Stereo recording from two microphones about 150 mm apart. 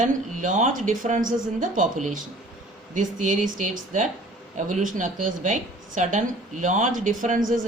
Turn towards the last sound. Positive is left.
turn(degrees=-60)  # may be behind; listen again after turning